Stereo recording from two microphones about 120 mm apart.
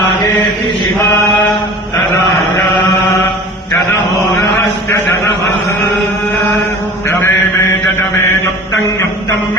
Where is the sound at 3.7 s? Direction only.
25° left (ahead or behind).